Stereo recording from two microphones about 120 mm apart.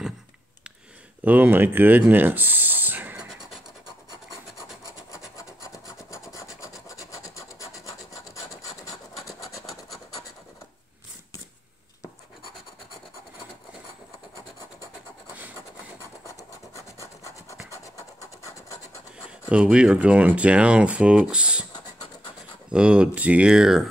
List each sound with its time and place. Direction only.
1.2 s speech: 15° right (ahead or behind)
5.1 s rub: 25° left (ahead or behind)
16.0 s rub: 25° left (ahead or behind)
19.5 s speech: 10° right (ahead or behind)
22.7 s speech: 10° right (ahead or behind)